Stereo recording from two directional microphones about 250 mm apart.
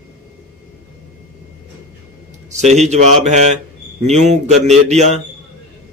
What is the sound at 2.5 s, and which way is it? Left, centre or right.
Mantra, right.